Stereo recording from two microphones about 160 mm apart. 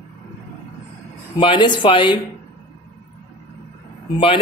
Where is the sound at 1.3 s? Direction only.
30° left (ahead or behind).